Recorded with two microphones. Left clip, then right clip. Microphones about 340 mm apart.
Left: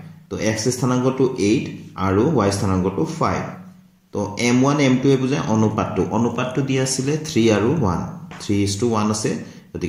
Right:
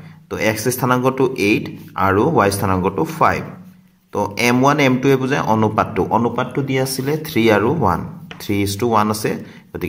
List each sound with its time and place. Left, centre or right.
0.3 s a man's voice: right